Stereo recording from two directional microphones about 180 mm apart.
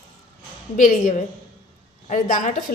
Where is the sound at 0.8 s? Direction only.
45° left (ahead or behind).